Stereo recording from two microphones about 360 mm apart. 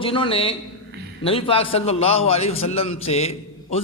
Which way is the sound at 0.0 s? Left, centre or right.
Centre.